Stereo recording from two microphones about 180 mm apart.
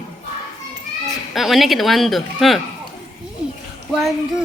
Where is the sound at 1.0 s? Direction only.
Centre (ahead or behind).